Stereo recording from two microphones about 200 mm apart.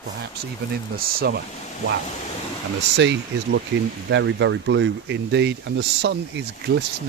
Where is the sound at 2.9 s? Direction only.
60° right (ahead or behind).